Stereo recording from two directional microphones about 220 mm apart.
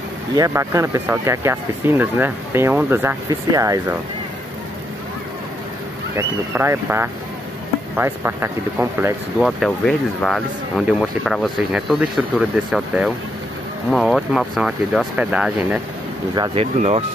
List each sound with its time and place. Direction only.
0.4 s speech: 15° right (ahead or behind)
6.1 s speech: 10° right (ahead or behind)
9.4 s speech: centre (ahead or behind)
16.3 s speech: 25° right (ahead or behind)